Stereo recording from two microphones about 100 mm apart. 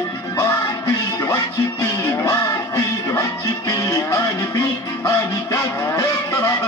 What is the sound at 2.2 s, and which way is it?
Music, 30° left (ahead or behind).